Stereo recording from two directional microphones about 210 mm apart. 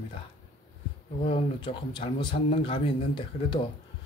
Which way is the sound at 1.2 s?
25° left (ahead or behind).